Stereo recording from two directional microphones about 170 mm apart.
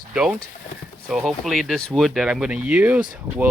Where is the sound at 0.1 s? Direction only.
5° right (ahead or behind).